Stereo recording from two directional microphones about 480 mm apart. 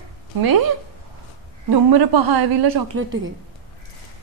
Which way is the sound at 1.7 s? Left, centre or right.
Right.